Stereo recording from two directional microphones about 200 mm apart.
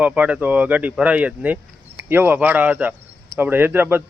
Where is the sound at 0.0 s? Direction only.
5° right (ahead or behind).